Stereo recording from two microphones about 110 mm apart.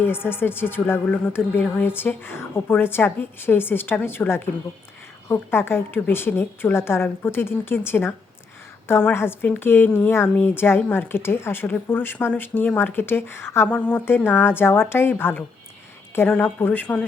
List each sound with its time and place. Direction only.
0.0 s a woman's voice: 20° left (ahead or behind)